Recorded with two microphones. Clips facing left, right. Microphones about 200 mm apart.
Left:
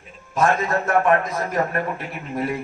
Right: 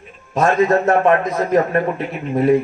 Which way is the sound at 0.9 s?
25° right (ahead or behind).